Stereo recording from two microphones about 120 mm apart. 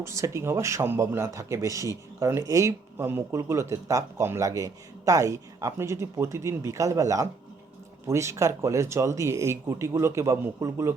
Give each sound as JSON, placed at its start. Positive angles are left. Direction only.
{"t": 0.0, "sound": "speech", "side_deg": -25}